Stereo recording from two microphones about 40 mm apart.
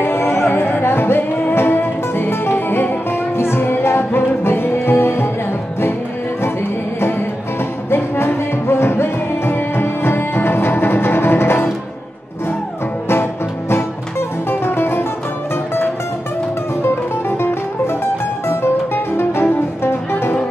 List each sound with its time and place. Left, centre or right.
0.0 s music: left
0.8 s music: left
2.8 s music: left
3.3 s music: left
7.0 s music: left
8.6 s music: left
13.1 s music: left
14.5 s music: left
19.1 s music: left